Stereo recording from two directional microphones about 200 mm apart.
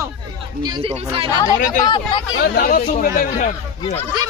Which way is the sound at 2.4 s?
50° left (ahead or behind).